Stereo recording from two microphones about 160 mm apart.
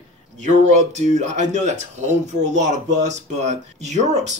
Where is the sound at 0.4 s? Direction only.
50° right (ahead or behind).